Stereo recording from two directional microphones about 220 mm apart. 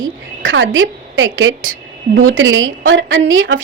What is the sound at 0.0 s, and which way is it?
A woman's voice, 60° right (ahead or behind).